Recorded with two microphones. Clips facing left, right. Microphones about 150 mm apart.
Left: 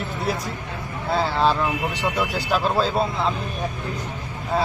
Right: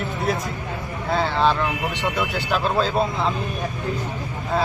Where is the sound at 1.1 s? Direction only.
5° left (ahead or behind).